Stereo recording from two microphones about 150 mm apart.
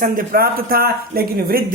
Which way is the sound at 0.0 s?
65° right (ahead or behind).